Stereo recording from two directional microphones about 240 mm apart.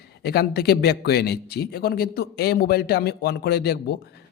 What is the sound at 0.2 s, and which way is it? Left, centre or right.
Speech, left.